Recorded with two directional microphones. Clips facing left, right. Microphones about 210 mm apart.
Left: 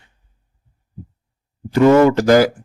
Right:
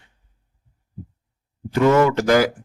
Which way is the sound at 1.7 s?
35° left (ahead or behind).